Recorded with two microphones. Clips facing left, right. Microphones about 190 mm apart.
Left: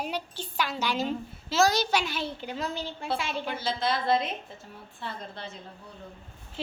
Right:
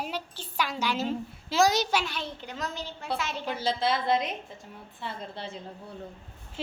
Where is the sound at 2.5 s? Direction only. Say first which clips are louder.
Left 3 dB; 30° left (ahead or behind).